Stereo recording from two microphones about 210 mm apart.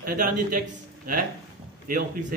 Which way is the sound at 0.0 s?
40° right (ahead or behind).